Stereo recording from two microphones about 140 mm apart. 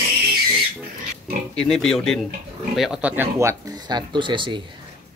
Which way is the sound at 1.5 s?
5° left (ahead or behind).